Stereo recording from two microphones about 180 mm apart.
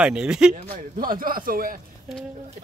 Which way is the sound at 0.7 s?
50° right (ahead or behind).